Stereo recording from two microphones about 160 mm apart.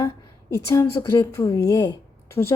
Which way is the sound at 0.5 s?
15° left (ahead or behind).